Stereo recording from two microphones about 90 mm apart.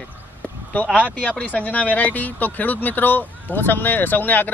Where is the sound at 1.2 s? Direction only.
15° left (ahead or behind).